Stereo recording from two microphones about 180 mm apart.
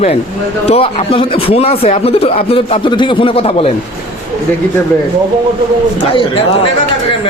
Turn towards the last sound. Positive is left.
turn(degrees=30)  # may be behind; listen again after turning